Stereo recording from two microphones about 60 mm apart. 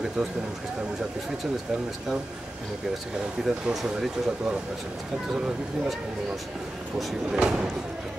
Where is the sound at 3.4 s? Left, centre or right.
Centre.